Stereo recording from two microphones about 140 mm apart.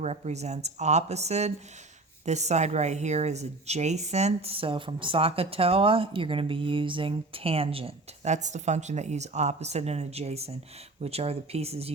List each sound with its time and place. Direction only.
0.0 s speech: 50° right (ahead or behind)